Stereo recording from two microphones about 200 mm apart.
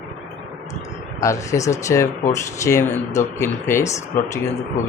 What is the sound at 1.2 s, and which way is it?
Speech, 15° left (ahead or behind).